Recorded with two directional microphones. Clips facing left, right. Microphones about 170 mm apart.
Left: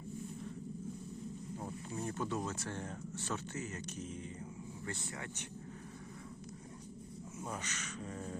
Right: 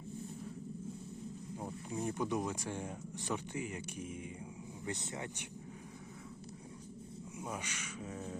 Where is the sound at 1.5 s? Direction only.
15° right (ahead or behind).